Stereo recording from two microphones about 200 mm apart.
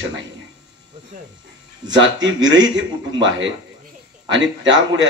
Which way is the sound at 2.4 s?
20° right (ahead or behind).